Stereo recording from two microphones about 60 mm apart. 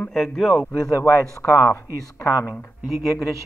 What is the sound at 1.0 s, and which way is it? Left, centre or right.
Speech, left.